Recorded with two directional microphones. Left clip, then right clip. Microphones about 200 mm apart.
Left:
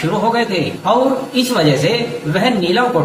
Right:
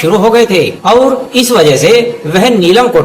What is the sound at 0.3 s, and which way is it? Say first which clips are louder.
A man's voice: right 10 dB; 50° right (ahead or behind).